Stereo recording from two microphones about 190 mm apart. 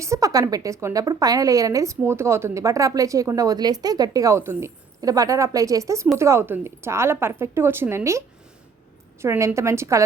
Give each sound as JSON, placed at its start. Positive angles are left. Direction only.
{"t": 0.0, "sound": "a woman's voice", "side_deg": -15}
{"t": 9.2, "sound": "a woman's voice", "side_deg": -10}